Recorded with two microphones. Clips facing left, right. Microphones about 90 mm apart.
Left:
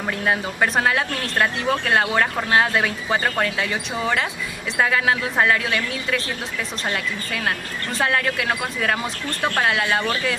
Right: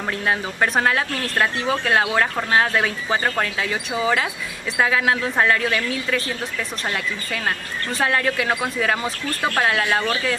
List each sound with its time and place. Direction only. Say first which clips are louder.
0.3 s speech: even; centre (ahead or behind)
8.0 s speech: right 1 dB; centre (ahead or behind)